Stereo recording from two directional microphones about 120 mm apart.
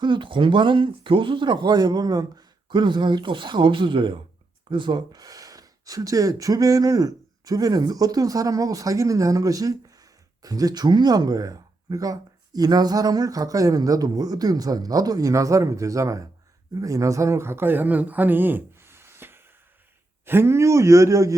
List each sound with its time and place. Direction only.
0.0 s speech: 45° right (ahead or behind); by 21.3 s 25° right (ahead or behind)